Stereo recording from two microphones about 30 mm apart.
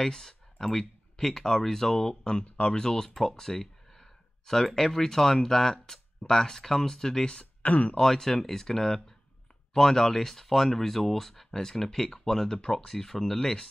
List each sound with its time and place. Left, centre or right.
0.0 s speech: centre
7.6 s speech: left
8.1 s speech: centre